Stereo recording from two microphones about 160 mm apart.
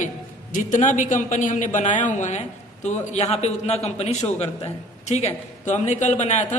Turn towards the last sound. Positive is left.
turn(degrees=45)  # may be behind; listen again after turning